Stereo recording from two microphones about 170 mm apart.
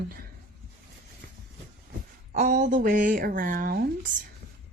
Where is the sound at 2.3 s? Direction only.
50° right (ahead or behind).